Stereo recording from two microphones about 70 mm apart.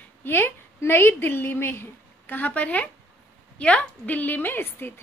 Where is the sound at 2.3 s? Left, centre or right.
Left.